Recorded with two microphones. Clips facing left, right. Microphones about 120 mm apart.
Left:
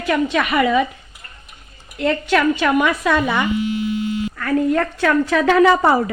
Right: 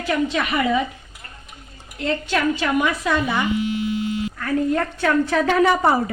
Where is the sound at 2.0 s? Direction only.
65° left (ahead or behind).